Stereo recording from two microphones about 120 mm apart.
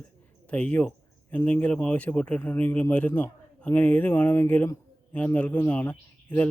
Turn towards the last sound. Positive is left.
turn(degrees=10)  # may be behind; listen again after turning